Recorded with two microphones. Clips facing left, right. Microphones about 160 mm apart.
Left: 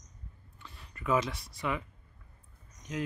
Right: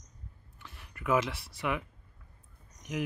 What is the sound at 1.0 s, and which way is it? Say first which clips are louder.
Speech: right 1 dB; 5° right (ahead or behind).